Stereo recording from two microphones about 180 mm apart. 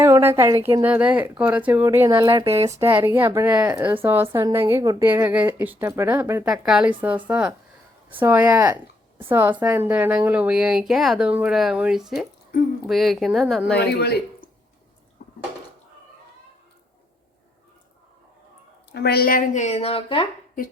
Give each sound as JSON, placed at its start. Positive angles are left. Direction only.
{"t": 0.0, "sound": "a woman's voice", "side_deg": -15}
{"t": 2.6, "sound": "a woman's voice", "side_deg": -15}
{"t": 13.7, "sound": "speech", "side_deg": 65}
{"t": 18.9, "sound": "speech", "side_deg": 65}